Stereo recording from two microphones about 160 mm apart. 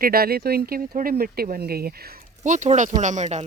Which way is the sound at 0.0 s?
70° right (ahead or behind).